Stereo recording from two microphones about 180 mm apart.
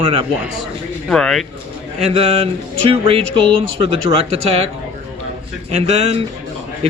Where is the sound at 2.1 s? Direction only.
30° right (ahead or behind).